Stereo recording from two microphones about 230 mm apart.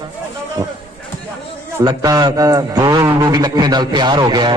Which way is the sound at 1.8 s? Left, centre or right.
Centre.